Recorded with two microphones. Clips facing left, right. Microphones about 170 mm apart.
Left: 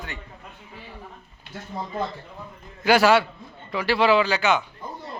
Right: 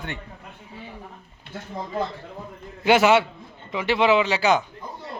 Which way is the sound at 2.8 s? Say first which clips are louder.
Right 1 dB; 20° right (ahead or behind).